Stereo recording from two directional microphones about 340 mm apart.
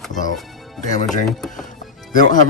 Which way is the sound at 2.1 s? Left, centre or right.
Left.